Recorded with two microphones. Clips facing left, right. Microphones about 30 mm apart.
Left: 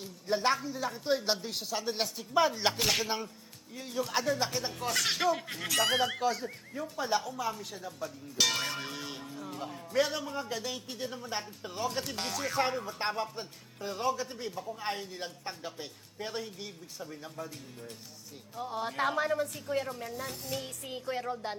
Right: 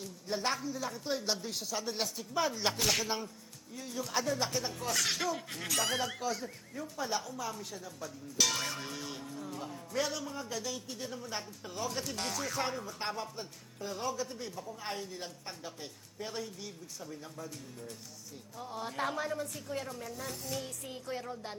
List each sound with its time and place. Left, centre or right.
0.0 s a man's voice: centre